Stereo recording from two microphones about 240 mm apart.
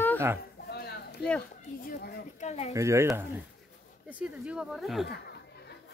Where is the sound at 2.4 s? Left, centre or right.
Left.